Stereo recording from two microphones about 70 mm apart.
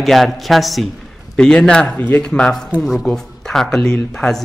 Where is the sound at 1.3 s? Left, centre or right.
Centre.